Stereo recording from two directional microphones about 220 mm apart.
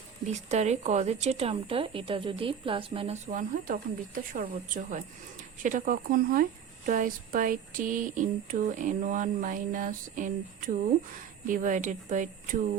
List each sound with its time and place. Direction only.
0.3 s speech: 30° right (ahead or behind)
3.5 s speech: 40° right (ahead or behind)